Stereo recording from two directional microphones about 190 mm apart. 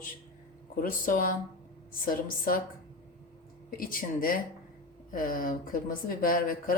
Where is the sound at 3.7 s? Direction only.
50° left (ahead or behind).